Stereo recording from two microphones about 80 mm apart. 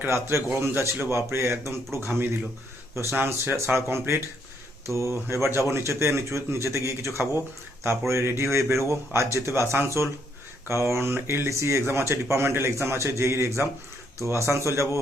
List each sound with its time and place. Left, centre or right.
0.1 s speech: right
3.2 s speech: right